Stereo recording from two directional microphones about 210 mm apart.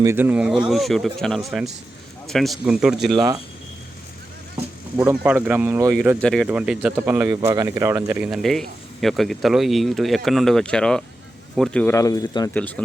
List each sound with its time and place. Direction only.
0.0 s a man's voice: 10° right (ahead or behind)
3.2 s speech: 15° right (ahead or behind)
4.9 s speech: 10° right (ahead or behind)
6.2 s a man's voice: 5° left (ahead or behind)
12.5 s speech: 5° left (ahead or behind)